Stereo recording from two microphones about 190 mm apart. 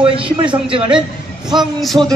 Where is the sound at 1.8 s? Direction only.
Centre (ahead or behind).